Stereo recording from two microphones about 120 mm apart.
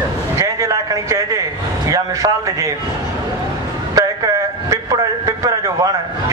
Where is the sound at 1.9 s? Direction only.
25° right (ahead or behind).